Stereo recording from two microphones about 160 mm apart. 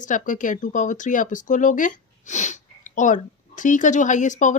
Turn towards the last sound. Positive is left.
turn(degrees=50)  # may be behind; listen again after turning